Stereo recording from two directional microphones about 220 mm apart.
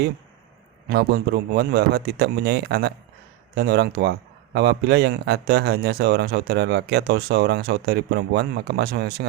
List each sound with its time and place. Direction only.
0.9 s speech: 50° right (ahead or behind)